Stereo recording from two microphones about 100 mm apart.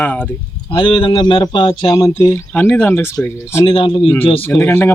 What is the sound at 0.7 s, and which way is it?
Speech, 60° left (ahead or behind).